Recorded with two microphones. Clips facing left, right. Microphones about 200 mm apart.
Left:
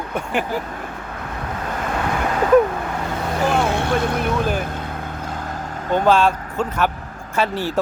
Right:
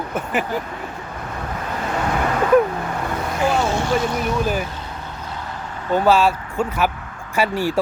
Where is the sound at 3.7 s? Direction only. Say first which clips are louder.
Even; 60° left (ahead or behind).